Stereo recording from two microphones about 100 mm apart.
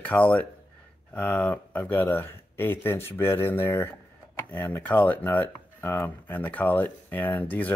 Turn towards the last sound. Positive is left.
turn(degrees=15)  # may be behind; listen again after turning